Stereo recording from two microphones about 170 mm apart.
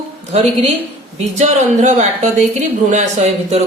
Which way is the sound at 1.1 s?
45° right (ahead or behind).